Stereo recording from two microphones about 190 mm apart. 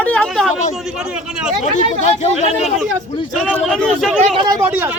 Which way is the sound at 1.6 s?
35° left (ahead or behind).